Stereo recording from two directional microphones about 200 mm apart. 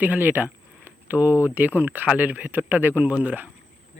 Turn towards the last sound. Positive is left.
turn(degrees=-10)  # may be behind; listen again after turning